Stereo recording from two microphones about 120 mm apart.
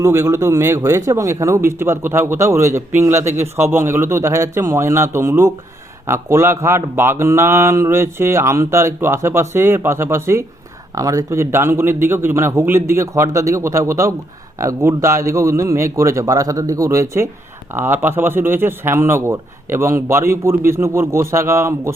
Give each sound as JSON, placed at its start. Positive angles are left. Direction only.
{"t": 0.0, "sound": "speech", "side_deg": -20}